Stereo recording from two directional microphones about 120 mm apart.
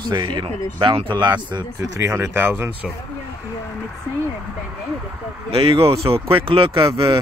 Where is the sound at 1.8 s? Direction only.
25° right (ahead or behind).